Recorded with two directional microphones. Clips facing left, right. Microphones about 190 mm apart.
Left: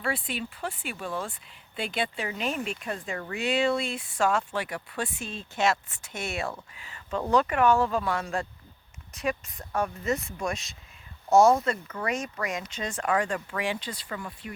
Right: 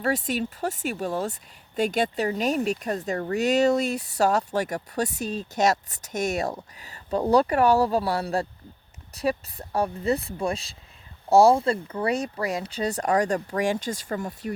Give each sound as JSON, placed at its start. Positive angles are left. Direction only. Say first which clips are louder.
{"t": 0.0, "sound": "speech", "louder": "right 6 dB", "side_deg": -40}